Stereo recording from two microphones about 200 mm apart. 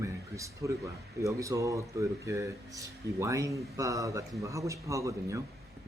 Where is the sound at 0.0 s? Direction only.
15° right (ahead or behind).